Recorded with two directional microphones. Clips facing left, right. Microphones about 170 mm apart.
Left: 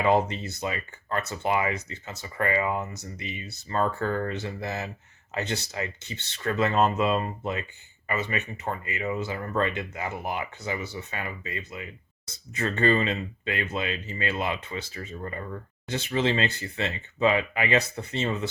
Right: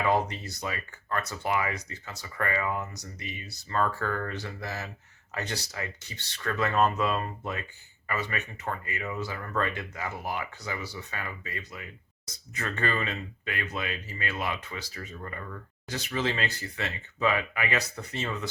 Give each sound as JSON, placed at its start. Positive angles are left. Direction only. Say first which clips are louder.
{"t": 0.0, "sound": "speech", "louder": "left 4 dB", "side_deg": 25}